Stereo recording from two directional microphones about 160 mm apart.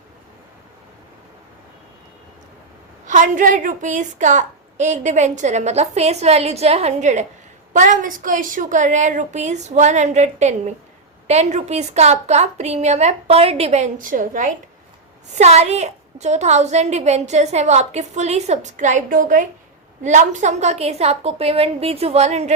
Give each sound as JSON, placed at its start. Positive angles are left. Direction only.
{"t": 3.1, "sound": "a woman's voice", "side_deg": -55}
{"t": 15.4, "sound": "a woman's voice", "side_deg": -45}